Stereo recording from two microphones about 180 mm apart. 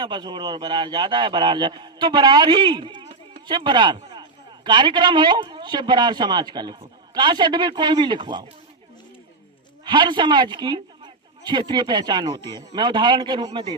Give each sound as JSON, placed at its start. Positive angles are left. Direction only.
{"t": 0.0, "sound": "a man's voice", "side_deg": -25}
{"t": 9.8, "sound": "a man's voice", "side_deg": -25}